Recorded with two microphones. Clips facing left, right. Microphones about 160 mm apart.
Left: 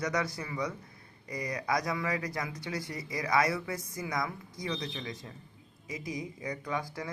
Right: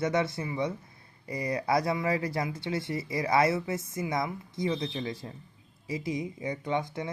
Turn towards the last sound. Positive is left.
turn(degrees=-25)  # may be behind; listen again after turning